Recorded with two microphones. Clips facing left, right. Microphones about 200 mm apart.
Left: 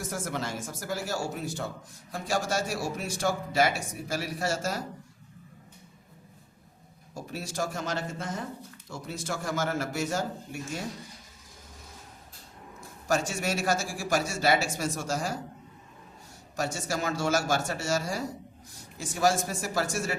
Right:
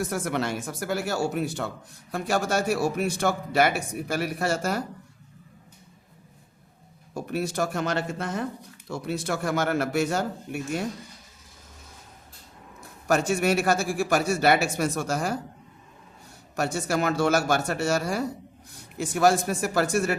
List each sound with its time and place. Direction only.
0.0 s a man's voice: 65° right (ahead or behind)
7.1 s a man's voice: 60° right (ahead or behind)
13.1 s a man's voice: 60° right (ahead or behind)
16.6 s a man's voice: 60° right (ahead or behind)